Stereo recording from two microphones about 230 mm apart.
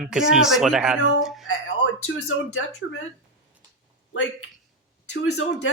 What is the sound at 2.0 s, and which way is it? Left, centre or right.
Speech, left.